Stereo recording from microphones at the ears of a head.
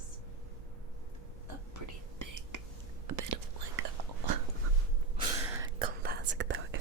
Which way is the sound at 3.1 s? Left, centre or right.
Right.